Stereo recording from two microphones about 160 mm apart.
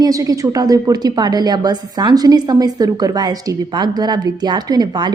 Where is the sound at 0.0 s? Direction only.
20° right (ahead or behind).